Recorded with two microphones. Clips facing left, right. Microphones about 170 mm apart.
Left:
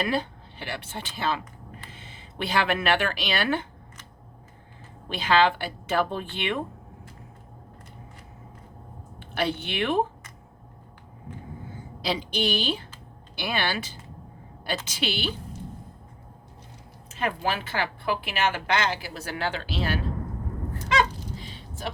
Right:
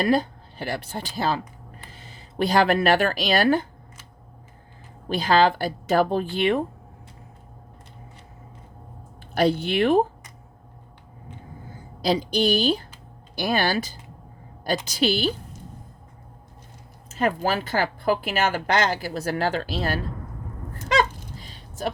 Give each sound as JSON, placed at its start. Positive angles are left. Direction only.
{"t": 0.0, "sound": "speech", "side_deg": -40}
{"t": 5.0, "sound": "speech", "side_deg": -40}
{"t": 9.1, "sound": "speech", "side_deg": -40}
{"t": 11.7, "sound": "a woman's voice", "side_deg": -40}
{"t": 17.1, "sound": "speech", "side_deg": -40}
{"t": 20.7, "sound": "a sound", "side_deg": -45}